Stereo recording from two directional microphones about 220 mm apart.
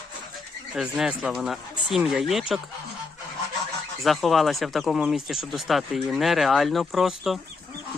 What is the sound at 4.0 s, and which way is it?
Speech, centre (ahead or behind).